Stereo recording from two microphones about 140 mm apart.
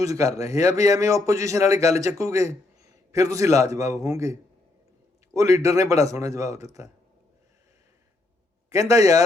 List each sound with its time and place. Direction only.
0.0 s a man's voice: 25° right (ahead or behind)
8.7 s a man's voice: 25° right (ahead or behind)